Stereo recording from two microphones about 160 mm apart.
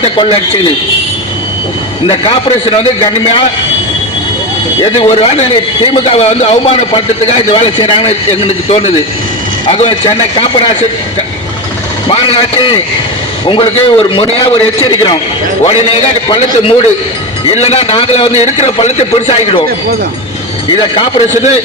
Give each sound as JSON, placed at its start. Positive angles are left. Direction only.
{"t": 0.0, "sound": "a man's voice", "side_deg": 35}
{"t": 2.0, "sound": "a man's voice", "side_deg": 35}
{"t": 4.8, "sound": "a man's voice", "side_deg": 40}
{"t": 12.0, "sound": "a man's voice", "side_deg": 35}
{"t": 20.9, "sound": "a man's voice", "side_deg": 40}